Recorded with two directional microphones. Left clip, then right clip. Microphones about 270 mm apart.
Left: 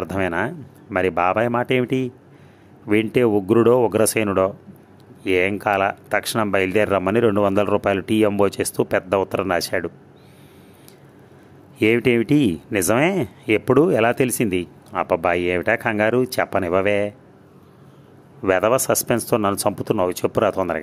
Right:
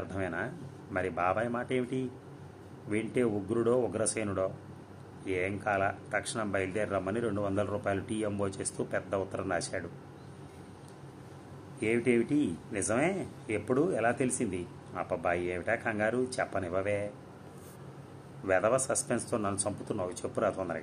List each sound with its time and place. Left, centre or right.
0.1 s speech: left
11.8 s speech: left
18.4 s speech: left